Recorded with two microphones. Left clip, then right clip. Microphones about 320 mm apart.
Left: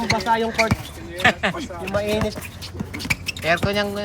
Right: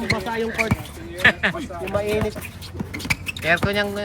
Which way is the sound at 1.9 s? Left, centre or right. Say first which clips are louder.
Even; left.